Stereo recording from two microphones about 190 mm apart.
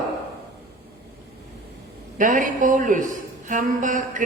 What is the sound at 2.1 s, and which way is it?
A man's voice, 45° right (ahead or behind).